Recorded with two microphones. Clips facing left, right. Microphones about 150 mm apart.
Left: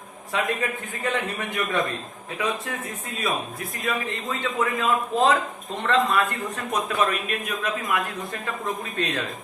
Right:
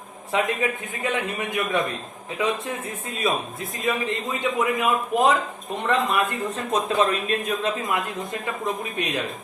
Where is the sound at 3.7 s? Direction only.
20° right (ahead or behind).